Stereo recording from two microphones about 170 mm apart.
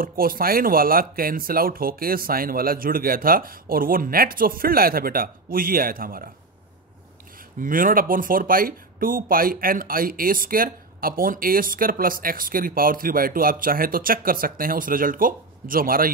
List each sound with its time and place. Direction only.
0.0 s speech: 55° right (ahead or behind)
7.3 s speech: 55° right (ahead or behind)